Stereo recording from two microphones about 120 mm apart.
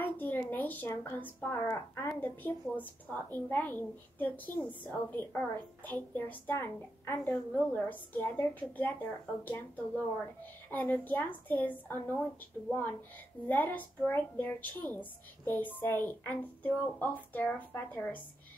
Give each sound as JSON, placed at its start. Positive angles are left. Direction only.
{"t": 0.0, "sound": "a woman's voice", "side_deg": 15}
{"t": 13.5, "sound": "a woman's voice", "side_deg": 15}